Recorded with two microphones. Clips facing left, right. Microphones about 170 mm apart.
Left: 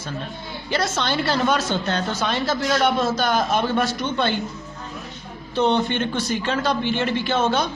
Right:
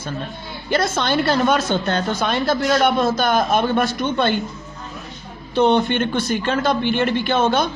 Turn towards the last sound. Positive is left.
turn(degrees=-55)  # may be behind; listen again after turning